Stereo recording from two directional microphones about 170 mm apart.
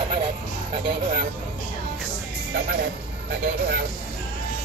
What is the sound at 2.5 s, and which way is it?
Music, 70° right (ahead or behind).